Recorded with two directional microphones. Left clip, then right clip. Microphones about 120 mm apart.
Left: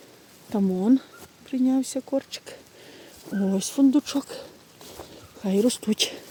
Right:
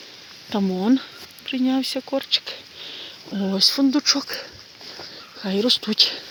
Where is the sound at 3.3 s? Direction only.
5° right (ahead or behind).